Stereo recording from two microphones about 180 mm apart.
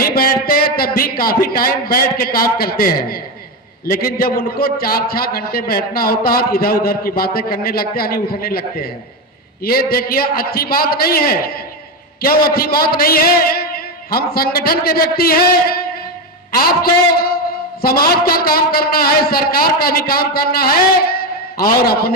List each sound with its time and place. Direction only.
0.0 s a man's voice: 55° left (ahead or behind)